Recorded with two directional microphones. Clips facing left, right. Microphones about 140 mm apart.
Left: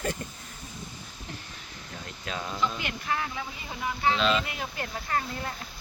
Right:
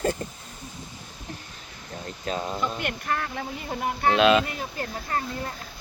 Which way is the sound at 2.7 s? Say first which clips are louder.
Right 3 dB; 50° right (ahead or behind).